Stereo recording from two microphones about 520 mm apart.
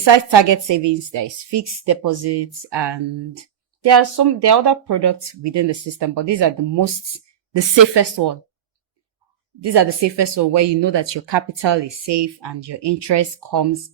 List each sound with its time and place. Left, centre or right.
0.0 s a woman's voice: right
9.6 s speech: right